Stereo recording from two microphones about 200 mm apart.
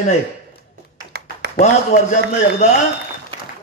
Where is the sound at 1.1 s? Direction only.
55° right (ahead or behind).